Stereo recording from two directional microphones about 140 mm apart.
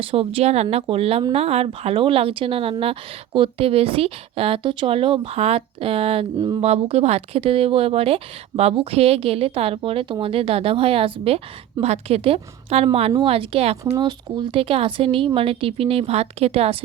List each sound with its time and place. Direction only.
0.0 s a woman's voice: 40° right (ahead or behind)
13.9 s speech: 30° right (ahead or behind)